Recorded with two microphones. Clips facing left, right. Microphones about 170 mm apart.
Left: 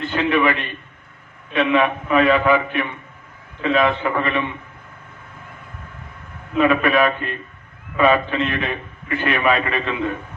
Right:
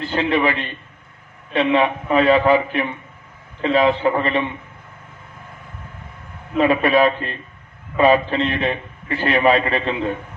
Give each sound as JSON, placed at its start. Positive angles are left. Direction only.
{"t": 0.0, "sound": "a man's voice", "side_deg": -35}
{"t": 6.6, "sound": "a man's voice", "side_deg": -30}